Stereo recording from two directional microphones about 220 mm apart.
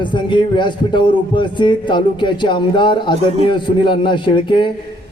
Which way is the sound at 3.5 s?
20° left (ahead or behind).